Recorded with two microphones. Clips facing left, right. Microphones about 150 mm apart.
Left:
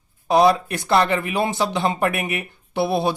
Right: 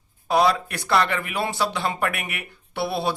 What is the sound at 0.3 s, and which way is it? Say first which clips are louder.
Speech: left 4 dB; 20° left (ahead or behind).